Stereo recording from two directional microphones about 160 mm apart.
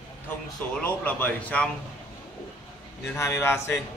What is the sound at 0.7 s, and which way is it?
Speech, 10° left (ahead or behind).